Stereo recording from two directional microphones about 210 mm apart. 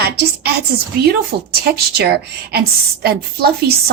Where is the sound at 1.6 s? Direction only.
50° right (ahead or behind).